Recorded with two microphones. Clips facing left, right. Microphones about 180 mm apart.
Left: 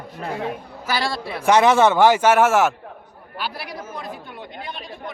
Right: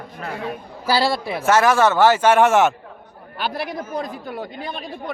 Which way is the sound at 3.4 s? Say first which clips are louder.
Right 5 dB; 50° right (ahead or behind).